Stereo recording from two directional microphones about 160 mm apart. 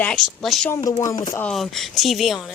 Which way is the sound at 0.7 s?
25° left (ahead or behind).